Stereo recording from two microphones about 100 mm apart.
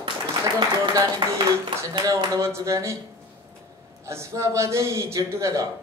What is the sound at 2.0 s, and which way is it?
Speech, 30° right (ahead or behind).